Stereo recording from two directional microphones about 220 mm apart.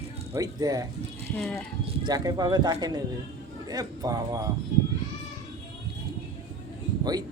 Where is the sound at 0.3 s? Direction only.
15° right (ahead or behind).